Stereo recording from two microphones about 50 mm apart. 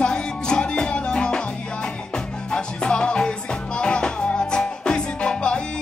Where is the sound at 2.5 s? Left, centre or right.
Centre.